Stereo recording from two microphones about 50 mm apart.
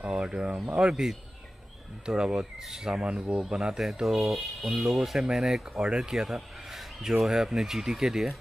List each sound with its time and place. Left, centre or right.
0.0 s speech: right
2.0 s speech: centre
3.0 s speech: right